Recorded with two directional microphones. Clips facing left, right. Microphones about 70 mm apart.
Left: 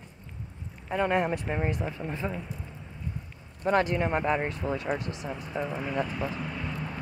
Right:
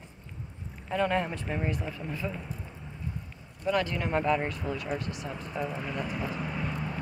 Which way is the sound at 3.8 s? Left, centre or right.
Left.